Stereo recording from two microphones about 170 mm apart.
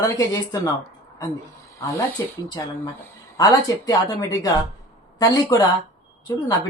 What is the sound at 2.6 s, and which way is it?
A woman's voice, 20° left (ahead or behind).